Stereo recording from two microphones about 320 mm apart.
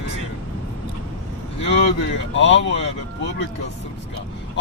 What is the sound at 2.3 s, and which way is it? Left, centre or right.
Speech, left.